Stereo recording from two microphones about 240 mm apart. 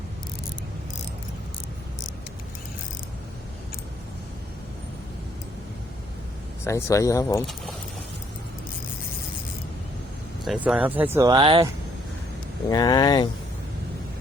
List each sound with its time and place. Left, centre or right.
6.7 s speech: centre
10.4 s speech: centre
12.6 s speech: centre